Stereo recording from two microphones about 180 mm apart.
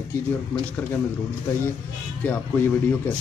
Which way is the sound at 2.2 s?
10° left (ahead or behind).